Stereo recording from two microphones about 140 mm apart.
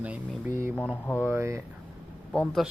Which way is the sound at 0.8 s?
15° left (ahead or behind).